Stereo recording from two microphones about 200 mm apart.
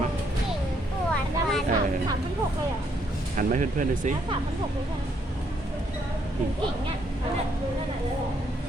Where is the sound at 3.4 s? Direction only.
40° right (ahead or behind).